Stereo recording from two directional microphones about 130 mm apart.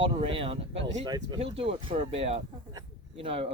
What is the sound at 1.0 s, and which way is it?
Speech, 35° right (ahead or behind).